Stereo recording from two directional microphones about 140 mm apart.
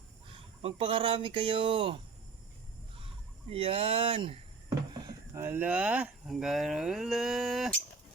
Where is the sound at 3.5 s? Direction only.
40° right (ahead or behind).